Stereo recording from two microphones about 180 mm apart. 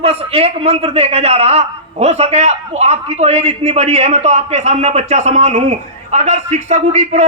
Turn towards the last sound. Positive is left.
turn(degrees=-40)  # may be behind; listen again after turning